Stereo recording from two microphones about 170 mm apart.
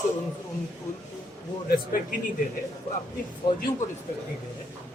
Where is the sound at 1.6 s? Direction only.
55° left (ahead or behind).